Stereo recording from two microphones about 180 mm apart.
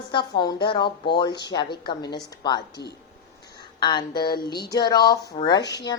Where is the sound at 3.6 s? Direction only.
25° left (ahead or behind).